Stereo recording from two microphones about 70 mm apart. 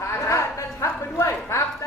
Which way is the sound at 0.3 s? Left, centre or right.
Left.